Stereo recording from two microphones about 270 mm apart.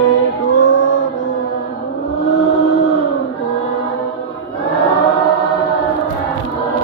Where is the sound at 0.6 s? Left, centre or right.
Left.